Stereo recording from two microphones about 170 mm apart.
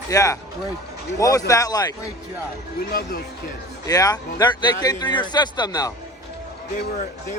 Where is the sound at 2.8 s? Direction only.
60° left (ahead or behind).